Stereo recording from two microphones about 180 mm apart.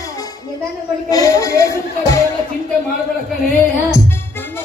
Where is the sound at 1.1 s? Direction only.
20° left (ahead or behind).